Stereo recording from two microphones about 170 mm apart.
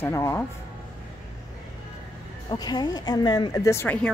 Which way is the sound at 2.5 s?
25° left (ahead or behind).